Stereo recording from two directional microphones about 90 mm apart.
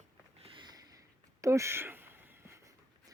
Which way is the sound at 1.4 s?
35° right (ahead or behind).